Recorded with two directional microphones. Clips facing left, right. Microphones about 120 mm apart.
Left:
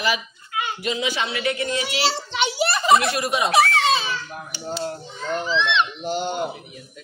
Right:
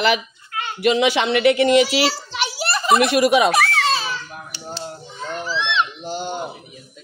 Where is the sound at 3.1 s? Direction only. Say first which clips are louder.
Right 8 dB; 75° right (ahead or behind).